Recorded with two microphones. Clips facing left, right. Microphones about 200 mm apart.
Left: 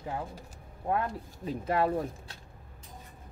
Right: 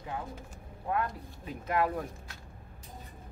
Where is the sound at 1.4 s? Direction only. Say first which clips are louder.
Left 2 dB; 30° left (ahead or behind).